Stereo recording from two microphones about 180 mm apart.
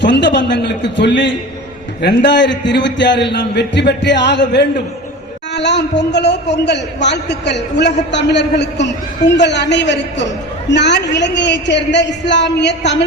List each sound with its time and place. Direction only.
0.0 s a man's voice: 75° left (ahead or behind)